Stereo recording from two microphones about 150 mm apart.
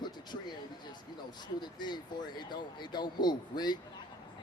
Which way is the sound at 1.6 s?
30° left (ahead or behind).